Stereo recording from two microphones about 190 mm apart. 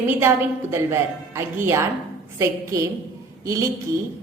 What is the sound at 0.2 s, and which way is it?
A woman's voice, 15° right (ahead or behind).